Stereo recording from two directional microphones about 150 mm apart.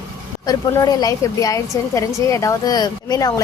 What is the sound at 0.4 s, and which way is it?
A woman's voice, 25° left (ahead or behind).